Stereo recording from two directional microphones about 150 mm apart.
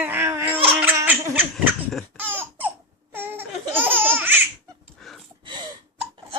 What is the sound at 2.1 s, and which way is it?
Laughter, 15° right (ahead or behind).